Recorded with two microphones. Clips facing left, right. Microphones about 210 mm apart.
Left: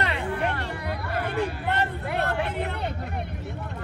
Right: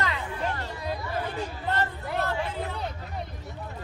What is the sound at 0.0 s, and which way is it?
Hubbub, 65° left (ahead or behind).